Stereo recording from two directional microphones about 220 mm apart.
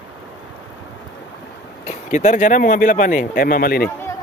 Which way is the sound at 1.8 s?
35° left (ahead or behind).